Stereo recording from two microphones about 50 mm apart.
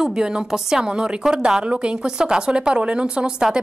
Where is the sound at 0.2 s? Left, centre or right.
Centre.